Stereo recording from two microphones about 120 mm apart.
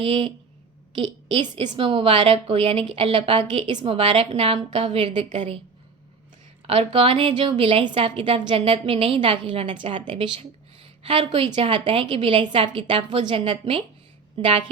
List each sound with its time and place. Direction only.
0.0 s a woman's voice: 50° right (ahead or behind)
6.7 s a woman's voice: 55° right (ahead or behind)